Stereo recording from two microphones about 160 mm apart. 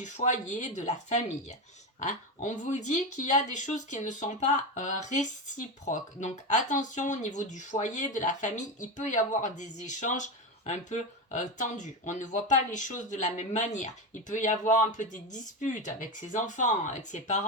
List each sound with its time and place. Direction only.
0.0 s speech: 50° left (ahead or behind)